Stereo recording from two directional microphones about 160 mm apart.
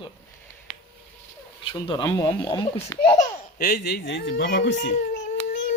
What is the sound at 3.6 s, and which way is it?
A man's voice, 80° left.